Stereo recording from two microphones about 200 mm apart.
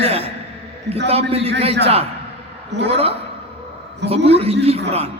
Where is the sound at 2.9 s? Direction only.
30° right (ahead or behind).